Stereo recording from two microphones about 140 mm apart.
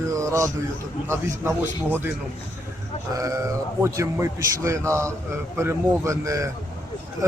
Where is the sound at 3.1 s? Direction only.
25° right (ahead or behind).